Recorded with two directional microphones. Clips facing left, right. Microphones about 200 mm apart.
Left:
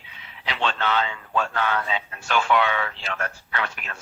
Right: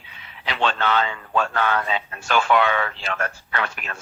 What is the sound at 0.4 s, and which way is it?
Speech, 50° right (ahead or behind).